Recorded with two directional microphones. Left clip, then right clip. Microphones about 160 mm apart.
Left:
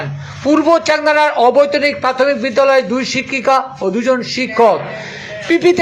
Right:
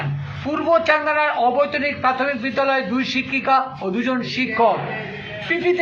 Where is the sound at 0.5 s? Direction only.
35° left (ahead or behind).